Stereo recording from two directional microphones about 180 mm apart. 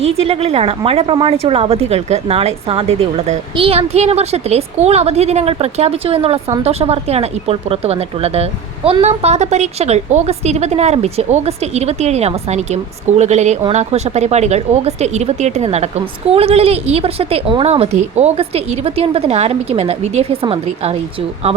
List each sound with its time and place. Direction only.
0.2 s speech: 35° right (ahead or behind)